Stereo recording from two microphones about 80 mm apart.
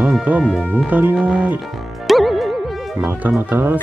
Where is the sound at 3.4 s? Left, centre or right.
Right.